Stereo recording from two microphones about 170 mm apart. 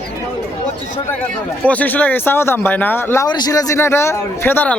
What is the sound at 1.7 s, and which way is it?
A man's voice, 10° left (ahead or behind).